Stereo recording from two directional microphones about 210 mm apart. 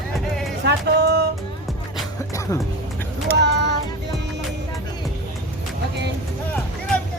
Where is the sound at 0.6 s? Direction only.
50° right (ahead or behind).